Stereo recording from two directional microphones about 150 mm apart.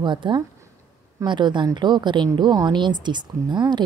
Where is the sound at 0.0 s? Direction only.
30° right (ahead or behind).